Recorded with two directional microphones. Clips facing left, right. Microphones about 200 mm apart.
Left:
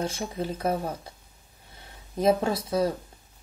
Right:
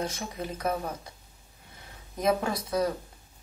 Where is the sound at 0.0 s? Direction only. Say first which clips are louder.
Left 3 dB; 30° left (ahead or behind).